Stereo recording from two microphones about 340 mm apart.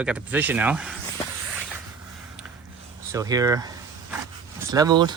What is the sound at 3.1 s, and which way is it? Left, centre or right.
Speech, centre.